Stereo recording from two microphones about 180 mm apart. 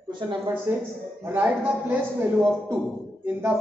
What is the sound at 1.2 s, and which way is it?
A man's voice, 10° right (ahead or behind).